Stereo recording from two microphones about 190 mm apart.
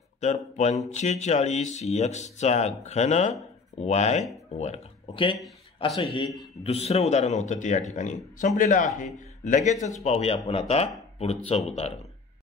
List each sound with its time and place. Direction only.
0.2 s a man's voice: 35° left (ahead or behind)